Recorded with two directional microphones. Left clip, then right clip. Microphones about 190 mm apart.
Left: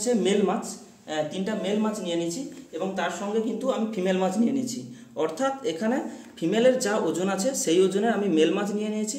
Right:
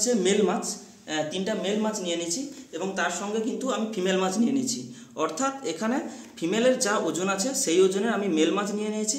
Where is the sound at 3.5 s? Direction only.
5° left (ahead or behind).